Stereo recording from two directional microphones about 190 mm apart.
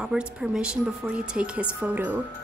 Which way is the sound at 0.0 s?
5° right (ahead or behind).